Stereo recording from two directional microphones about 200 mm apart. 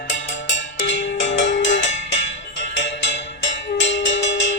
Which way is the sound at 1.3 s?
65° left (ahead or behind).